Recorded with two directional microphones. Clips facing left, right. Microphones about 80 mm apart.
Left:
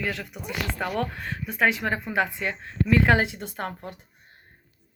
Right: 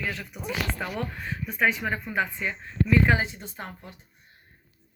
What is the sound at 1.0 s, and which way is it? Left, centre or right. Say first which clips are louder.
Speech: left 3 dB; left.